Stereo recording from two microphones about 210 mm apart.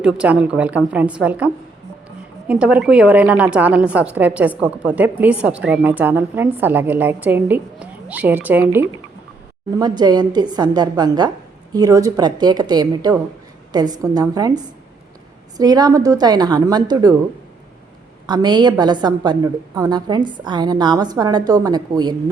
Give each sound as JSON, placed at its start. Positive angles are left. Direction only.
{"t": 0.0, "sound": "a woman's voice", "side_deg": -5}
{"t": 2.5, "sound": "a woman's voice", "side_deg": -5}
{"t": 9.7, "sound": "a woman's voice", "side_deg": -20}
{"t": 18.3, "sound": "a woman's voice", "side_deg": -20}